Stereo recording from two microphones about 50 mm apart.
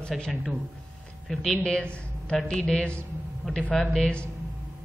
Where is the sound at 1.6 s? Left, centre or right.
Left.